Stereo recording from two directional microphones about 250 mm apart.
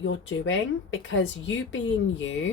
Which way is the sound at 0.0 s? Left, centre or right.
Left.